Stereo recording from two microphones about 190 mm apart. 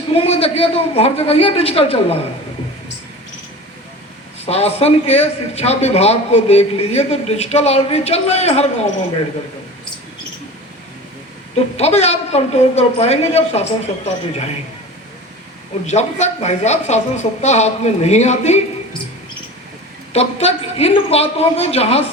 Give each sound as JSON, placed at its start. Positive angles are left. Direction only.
{"t": 0.1, "sound": "a man's voice", "side_deg": 30}
{"t": 4.4, "sound": "a man's voice", "side_deg": 35}
{"t": 11.8, "sound": "a man's voice", "side_deg": 35}
{"t": 15.9, "sound": "a man's voice", "side_deg": 35}
{"t": 20.1, "sound": "a man's voice", "side_deg": 35}